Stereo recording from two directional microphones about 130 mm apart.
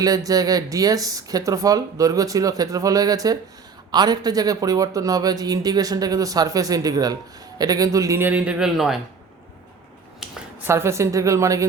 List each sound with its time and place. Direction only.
0.3 s a man's voice: 30° right (ahead or behind); by 9.0 s 5° right (ahead or behind)
10.2 s a sound: 5° right (ahead or behind)
10.7 s a man's voice: 20° right (ahead or behind)